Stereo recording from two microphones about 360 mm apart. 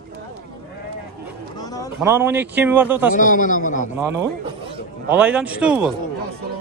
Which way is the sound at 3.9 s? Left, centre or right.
Centre.